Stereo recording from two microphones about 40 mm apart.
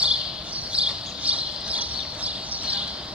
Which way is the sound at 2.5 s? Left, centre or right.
Right.